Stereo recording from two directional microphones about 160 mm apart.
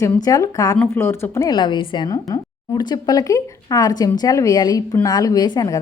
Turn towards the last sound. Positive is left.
turn(degrees=25)  # may be behind; listen again after turning